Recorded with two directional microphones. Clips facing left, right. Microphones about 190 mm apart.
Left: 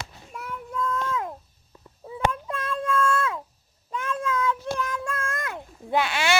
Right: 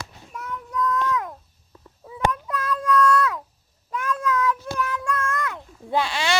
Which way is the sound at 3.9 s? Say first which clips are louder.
Right 3 dB; 25° left (ahead or behind).